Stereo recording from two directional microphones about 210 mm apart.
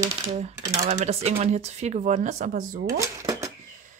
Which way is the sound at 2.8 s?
15° right (ahead or behind).